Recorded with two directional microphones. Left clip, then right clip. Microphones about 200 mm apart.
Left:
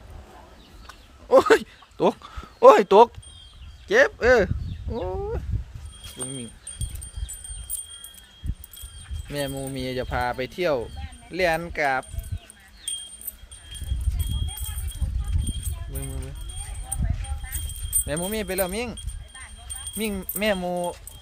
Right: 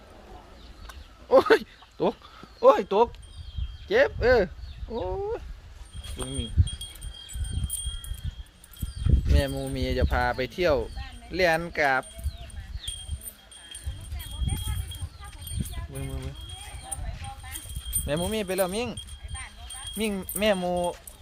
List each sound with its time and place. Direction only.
0.9 s a sound: 20° left (ahead or behind)
2.0 s speech: 35° left (ahead or behind); by 3.1 s 50° left (ahead or behind)
3.8 s speech: 25° left (ahead or behind)
6.1 s speech: centre (ahead or behind)
9.3 s speech: centre (ahead or behind)
16.0 s a sound: 5° right (ahead or behind)
18.0 s speech: 5° left (ahead or behind)
20.0 s speech: centre (ahead or behind)